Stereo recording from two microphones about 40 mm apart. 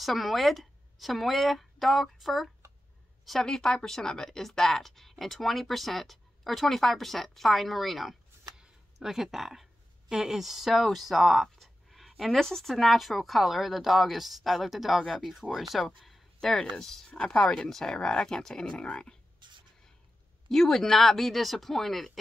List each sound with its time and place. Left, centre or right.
0.0 s speech: centre
3.4 s speech: centre
8.5 s a sound: centre
10.0 s speech: centre
16.3 s speech: centre
17.1 s speech: left
17.6 s speech: centre
20.4 s speech: centre